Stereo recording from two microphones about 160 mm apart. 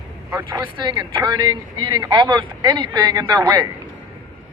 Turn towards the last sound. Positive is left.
turn(degrees=-25)  # may be behind; listen again after turning